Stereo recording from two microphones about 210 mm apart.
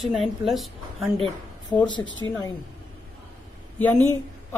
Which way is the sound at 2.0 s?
65° left (ahead or behind).